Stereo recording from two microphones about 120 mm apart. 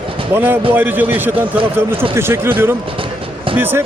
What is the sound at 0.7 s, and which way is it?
Speech, 15° right (ahead or behind).